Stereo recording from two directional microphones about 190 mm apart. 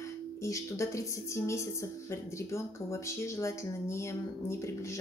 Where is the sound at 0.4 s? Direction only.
15° left (ahead or behind).